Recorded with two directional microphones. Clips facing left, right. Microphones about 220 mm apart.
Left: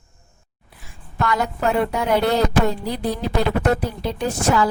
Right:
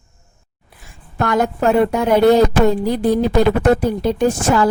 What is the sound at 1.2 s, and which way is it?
Speech, 50° right (ahead or behind).